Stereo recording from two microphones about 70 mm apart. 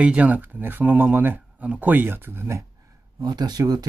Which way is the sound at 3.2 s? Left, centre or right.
Right.